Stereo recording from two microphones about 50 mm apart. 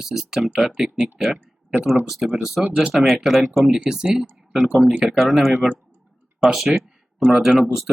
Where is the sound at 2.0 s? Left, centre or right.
Centre.